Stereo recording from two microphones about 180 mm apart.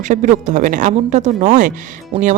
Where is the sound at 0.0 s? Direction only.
45° right (ahead or behind).